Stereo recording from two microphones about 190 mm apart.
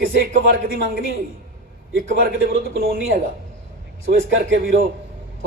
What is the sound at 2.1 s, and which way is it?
A man's voice, 55° right (ahead or behind).